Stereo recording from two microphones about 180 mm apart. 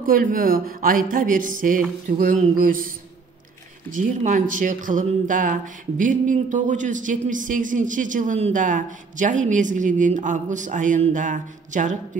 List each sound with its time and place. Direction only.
0.0 s speech: 50° right (ahead or behind)
3.9 s speech: 45° right (ahead or behind)